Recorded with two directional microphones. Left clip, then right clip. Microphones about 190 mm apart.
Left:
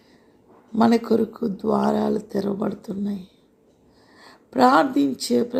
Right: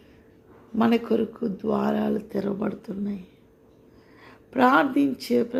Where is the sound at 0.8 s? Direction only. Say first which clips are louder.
Left 4 dB; 15° left (ahead or behind).